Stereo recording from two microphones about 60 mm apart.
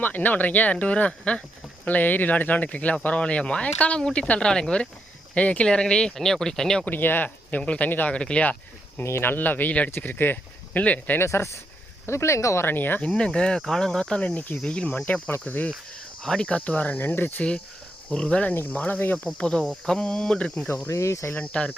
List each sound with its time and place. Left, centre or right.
0.0 s speech: left; by 6.8 s centre
6.8 s speech: left
7.6 s speech: centre
7.9 s speech: left
8.1 s speech: centre
9.0 s speech: left
11.2 s speech: left
12.6 s speech: left
13.0 s speech: centre
16.2 s speech: centre; by 17.4 s left
18.1 s speech: centre
18.5 s speech: left
20.8 s cricket: left
21.3 s speech: centre